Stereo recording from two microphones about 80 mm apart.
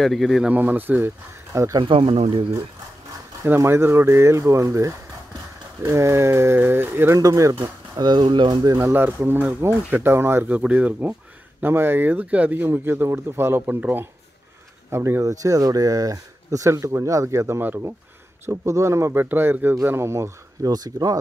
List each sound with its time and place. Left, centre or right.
0.0 s speech: centre
0.5 s speech: right
1.5 s speech: right
1.8 s speech: right
3.4 s speech: right
7.2 s speech: right
7.6 s speech: right
8.6 s speech: right
8.9 s speech: right
10.5 s speech: centre
14.9 s speech: right
15.3 s speech: right
19.2 s speech: right
20.7 s speech: right